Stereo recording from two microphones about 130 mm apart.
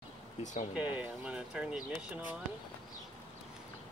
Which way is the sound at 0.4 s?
65° left (ahead or behind).